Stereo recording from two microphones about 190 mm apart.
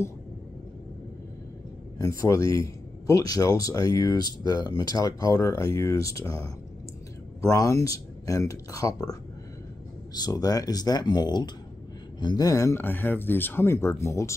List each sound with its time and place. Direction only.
2.0 s speech: 15° left (ahead or behind)
10.1 s speech: 20° left (ahead or behind)